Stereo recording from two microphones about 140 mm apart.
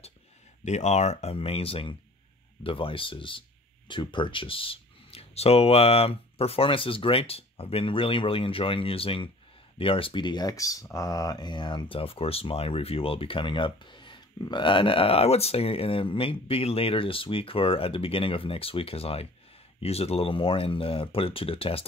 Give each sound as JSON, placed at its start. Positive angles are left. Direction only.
{"t": 0.7, "sound": "speech", "side_deg": 55}